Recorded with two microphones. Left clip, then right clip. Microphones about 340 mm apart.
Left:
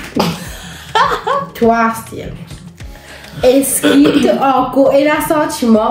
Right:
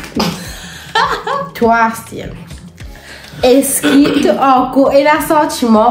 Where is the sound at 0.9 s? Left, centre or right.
Centre.